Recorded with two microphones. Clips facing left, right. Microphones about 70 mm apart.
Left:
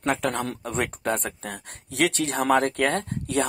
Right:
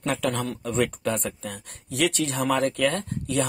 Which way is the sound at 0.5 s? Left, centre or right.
Left.